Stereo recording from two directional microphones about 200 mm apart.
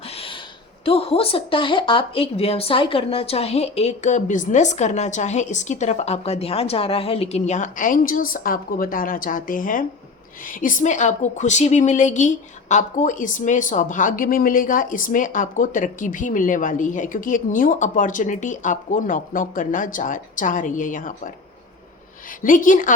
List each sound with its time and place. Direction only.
0.1 s a sound: 30° left (ahead or behind)
0.9 s a woman's voice: 30° left (ahead or behind)
22.4 s a woman's voice: 40° left (ahead or behind)